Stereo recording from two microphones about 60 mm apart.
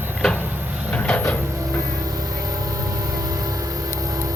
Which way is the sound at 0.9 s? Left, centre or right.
Centre.